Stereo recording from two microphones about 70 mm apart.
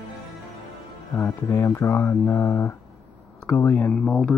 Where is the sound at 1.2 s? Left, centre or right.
Left.